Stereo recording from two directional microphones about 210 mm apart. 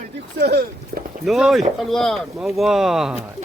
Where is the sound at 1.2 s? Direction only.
Centre (ahead or behind).